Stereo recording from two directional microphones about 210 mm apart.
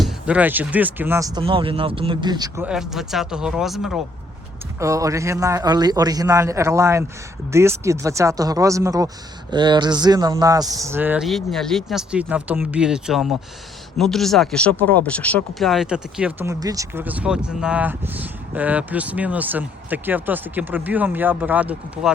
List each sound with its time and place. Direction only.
0.0 s speech: 5° right (ahead or behind)
2.6 s speech: centre (ahead or behind)
4.8 s speech: 15° right (ahead or behind)